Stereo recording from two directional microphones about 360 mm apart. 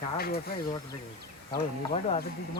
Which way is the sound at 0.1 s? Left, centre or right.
Left.